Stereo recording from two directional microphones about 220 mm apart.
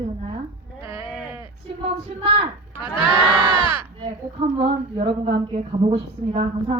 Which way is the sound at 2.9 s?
20° left (ahead or behind).